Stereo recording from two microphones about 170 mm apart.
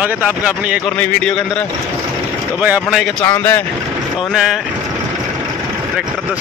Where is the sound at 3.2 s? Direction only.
15° left (ahead or behind).